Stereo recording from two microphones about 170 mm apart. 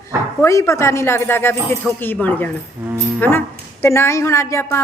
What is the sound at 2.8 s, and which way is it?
Speech, 15° right (ahead or behind).